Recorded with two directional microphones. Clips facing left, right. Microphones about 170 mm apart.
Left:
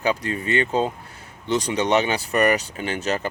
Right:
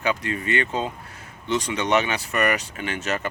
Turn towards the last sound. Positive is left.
turn(degrees=30)  # may be behind; listen again after turning